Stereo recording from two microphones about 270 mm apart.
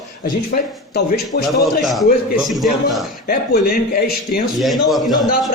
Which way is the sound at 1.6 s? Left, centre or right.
Centre.